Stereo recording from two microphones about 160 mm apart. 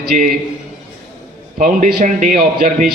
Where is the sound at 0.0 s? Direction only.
70° right (ahead or behind).